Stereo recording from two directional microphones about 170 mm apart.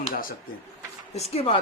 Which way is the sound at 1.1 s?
35° left (ahead or behind).